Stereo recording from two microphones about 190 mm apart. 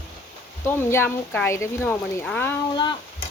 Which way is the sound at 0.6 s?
15° left (ahead or behind).